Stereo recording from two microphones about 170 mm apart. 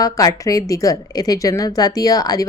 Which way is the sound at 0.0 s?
20° left (ahead or behind).